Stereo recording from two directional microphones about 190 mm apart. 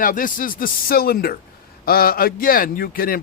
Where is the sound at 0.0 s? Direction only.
45° left (ahead or behind).